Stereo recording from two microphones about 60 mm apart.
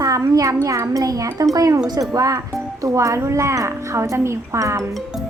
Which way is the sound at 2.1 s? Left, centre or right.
Right.